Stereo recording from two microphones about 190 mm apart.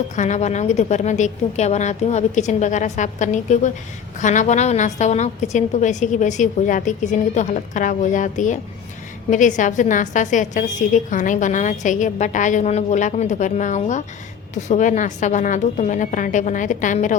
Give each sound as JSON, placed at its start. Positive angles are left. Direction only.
{"t": 0.2, "sound": "a woman's voice", "side_deg": 40}